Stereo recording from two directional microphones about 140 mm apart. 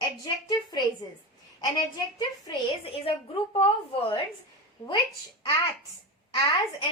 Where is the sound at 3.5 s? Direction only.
40° left (ahead or behind).